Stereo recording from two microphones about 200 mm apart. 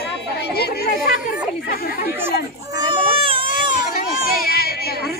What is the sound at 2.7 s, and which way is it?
Baby cry, 25° right (ahead or behind).